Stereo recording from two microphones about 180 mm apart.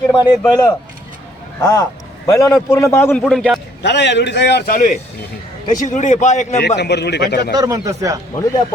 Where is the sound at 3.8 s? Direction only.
75° left (ahead or behind).